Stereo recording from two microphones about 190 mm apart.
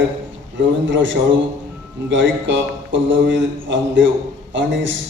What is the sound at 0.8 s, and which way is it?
A man's voice, 75° right (ahead or behind).